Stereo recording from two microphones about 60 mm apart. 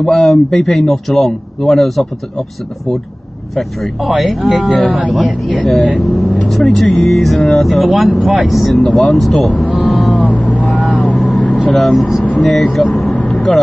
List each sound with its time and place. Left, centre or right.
0.0 s speech: centre
3.5 s speech: centre
10.3 s vehicle: left
10.6 s vehicle: centre
11.7 s speech: centre
13.3 s vehicle: centre